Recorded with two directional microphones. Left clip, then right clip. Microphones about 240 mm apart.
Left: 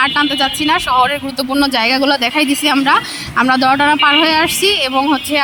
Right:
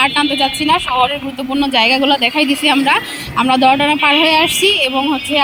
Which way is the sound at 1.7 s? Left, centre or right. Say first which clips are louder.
Right 4 dB; centre.